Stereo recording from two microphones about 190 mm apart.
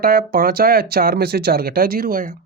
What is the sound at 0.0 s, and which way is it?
Speech, 50° right (ahead or behind).